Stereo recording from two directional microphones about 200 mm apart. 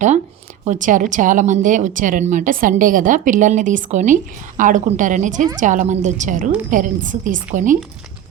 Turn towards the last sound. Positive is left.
turn(degrees=-40)  # may be behind; listen again after turning